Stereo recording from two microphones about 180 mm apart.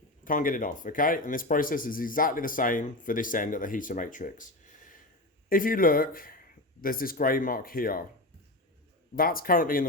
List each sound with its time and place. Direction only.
0.3 s speech: 50° left (ahead or behind)
5.5 s speech: 50° left (ahead or behind)
9.1 s speech: 55° left (ahead or behind)